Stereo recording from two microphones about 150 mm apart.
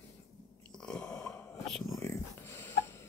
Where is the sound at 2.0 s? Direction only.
15° left (ahead or behind).